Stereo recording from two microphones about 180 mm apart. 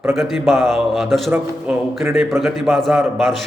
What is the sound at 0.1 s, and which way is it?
A man's voice, centre (ahead or behind).